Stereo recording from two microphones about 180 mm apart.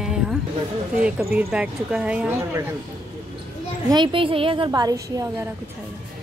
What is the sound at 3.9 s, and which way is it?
A woman's voice, 25° right (ahead or behind).